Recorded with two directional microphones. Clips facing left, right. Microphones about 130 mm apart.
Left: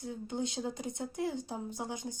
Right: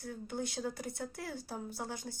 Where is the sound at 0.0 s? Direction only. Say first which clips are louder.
Left 3 dB; 20° left (ahead or behind).